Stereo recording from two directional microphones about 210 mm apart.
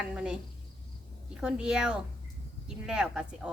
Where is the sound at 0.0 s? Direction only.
5° right (ahead or behind).